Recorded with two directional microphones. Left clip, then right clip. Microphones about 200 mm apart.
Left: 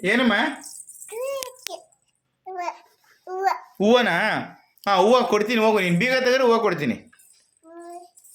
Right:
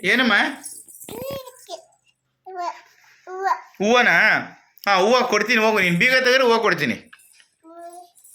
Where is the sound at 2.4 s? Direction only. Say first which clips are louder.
Right 1 dB; 10° left (ahead or behind).